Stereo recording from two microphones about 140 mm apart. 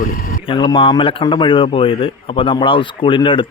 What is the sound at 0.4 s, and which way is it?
Speech, 35° left (ahead or behind).